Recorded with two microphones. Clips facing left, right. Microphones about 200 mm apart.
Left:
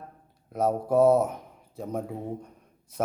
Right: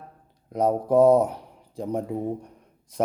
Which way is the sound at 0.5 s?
15° right (ahead or behind).